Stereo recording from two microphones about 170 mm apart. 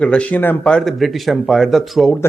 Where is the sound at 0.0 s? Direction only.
5° left (ahead or behind).